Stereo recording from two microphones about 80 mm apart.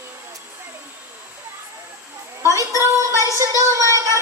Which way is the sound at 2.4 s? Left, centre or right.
Right.